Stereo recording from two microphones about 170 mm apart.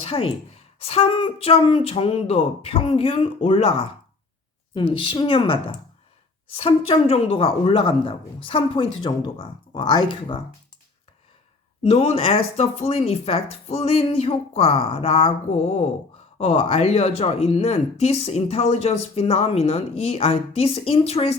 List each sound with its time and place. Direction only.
0.0 s a woman's voice: 35° left (ahead or behind)
11.8 s speech: 35° left (ahead or behind)